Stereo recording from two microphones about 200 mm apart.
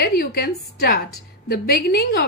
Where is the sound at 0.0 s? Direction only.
50° left (ahead or behind).